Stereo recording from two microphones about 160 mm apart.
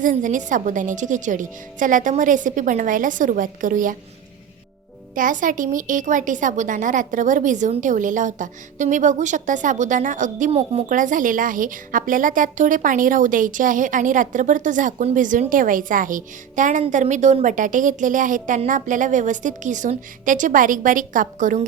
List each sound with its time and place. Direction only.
0.0 s a woman's voice: 55° right (ahead or behind)
5.1 s a woman's voice: 55° right (ahead or behind)
10.5 s speech: 40° right (ahead or behind)
10.8 s a woman's voice: 55° right (ahead or behind)